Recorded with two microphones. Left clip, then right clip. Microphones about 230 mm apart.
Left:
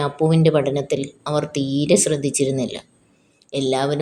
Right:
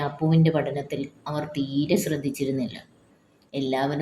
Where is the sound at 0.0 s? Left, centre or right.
Left.